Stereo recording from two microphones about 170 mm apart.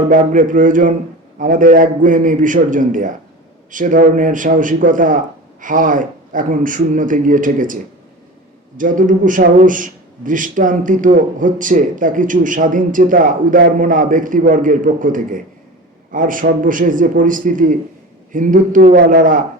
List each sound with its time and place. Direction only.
0.1 s a man's voice: 50° right (ahead or behind)
8.8 s a man's voice: 50° right (ahead or behind)